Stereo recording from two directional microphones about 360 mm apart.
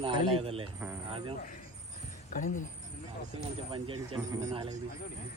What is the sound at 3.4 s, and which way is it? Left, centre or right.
Speech, centre.